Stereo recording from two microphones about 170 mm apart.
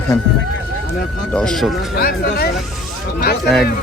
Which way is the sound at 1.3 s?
5° left (ahead or behind).